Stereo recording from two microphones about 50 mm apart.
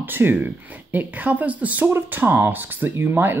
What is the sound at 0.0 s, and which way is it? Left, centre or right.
Speech, right.